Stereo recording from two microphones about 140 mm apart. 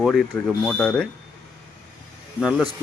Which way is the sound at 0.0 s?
Centre (ahead or behind).